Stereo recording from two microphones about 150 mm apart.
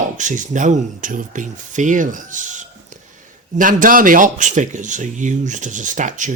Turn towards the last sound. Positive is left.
turn(degrees=-55)  # may be behind; listen again after turning